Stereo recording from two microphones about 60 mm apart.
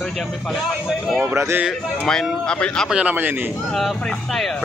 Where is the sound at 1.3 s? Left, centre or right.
Right.